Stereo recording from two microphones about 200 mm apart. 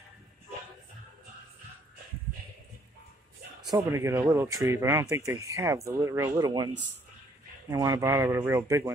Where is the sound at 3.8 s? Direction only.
15° right (ahead or behind).